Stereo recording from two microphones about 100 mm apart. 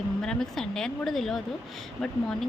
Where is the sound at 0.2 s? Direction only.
5° left (ahead or behind).